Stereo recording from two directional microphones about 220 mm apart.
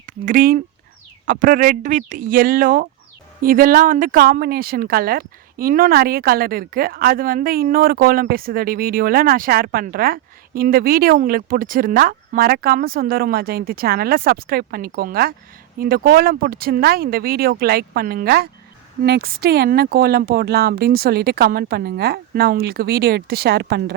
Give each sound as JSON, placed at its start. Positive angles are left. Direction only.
{"t": 0.0, "sound": "speech", "side_deg": -40}